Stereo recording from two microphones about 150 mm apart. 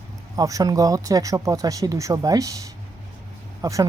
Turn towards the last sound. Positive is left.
turn(degrees=-20)  # may be behind; listen again after turning